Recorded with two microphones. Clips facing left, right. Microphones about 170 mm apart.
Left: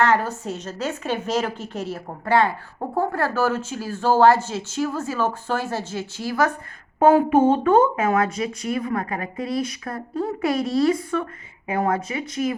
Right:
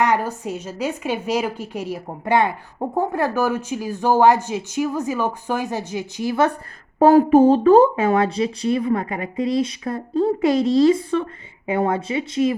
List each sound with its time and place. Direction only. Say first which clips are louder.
0.0 s speech: even; 15° right (ahead or behind)
7.0 s speech: right 3 dB; 40° right (ahead or behind)